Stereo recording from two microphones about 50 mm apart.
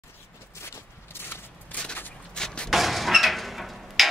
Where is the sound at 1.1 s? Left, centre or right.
Left.